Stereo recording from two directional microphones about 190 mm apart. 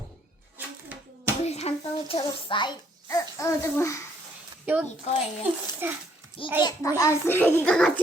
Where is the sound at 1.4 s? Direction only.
35° left (ahead or behind).